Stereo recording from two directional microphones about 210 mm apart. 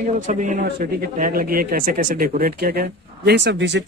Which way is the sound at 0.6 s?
50° right (ahead or behind).